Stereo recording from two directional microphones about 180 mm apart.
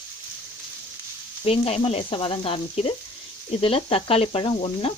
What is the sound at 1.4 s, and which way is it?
Speech, 35° left (ahead or behind).